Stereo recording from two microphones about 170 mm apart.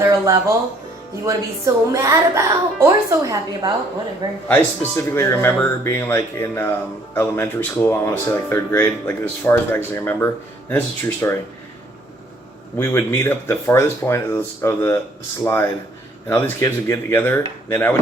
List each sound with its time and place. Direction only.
0.0 s a woman's voice: 20° right (ahead or behind)
4.4 s speech: 15° left (ahead or behind)
12.8 s speech: 15° left (ahead or behind)